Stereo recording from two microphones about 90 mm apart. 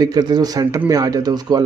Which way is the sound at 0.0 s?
45° right (ahead or behind).